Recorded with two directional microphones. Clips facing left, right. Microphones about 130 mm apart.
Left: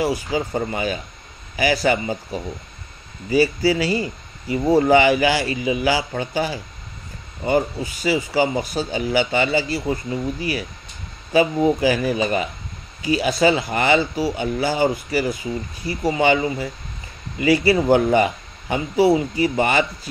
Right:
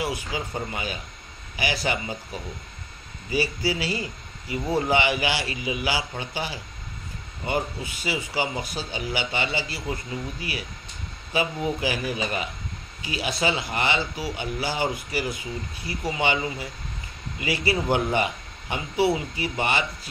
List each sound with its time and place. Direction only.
0.0 s speech: 40° left (ahead or behind)
3.3 s speech: 45° left (ahead or behind)
11.3 s speech: 45° left (ahead or behind)